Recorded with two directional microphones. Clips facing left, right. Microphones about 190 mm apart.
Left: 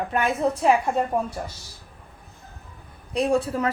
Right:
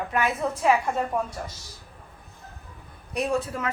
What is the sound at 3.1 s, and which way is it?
Speech, 30° left (ahead or behind).